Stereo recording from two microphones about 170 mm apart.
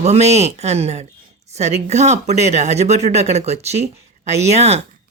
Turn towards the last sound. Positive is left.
turn(degrees=-40)  # may be behind; listen again after turning